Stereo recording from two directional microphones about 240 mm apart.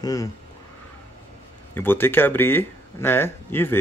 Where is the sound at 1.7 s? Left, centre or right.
Centre.